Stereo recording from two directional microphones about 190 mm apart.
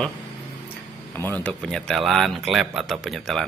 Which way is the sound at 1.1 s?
10° left (ahead or behind).